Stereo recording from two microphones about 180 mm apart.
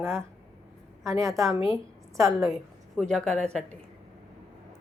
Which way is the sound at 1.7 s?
15° right (ahead or behind).